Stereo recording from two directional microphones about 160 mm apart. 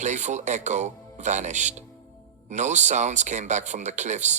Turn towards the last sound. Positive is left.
turn(degrees=-50)  # may be behind; listen again after turning